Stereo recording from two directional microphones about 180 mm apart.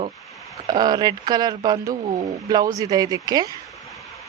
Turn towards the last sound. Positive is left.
turn(degrees=-20)  # may be behind; listen again after turning